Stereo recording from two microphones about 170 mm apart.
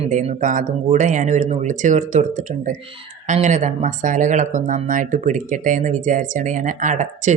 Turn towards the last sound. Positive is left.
turn(degrees=-45)  # may be behind; listen again after turning